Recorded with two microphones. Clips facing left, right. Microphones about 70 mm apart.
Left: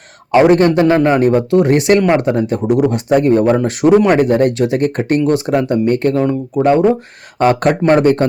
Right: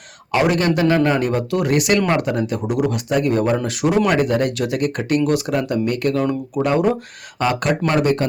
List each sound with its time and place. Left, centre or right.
0.3 s speech: left